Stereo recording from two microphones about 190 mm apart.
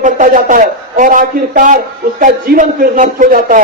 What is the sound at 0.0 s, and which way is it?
A man's voice, 45° right (ahead or behind).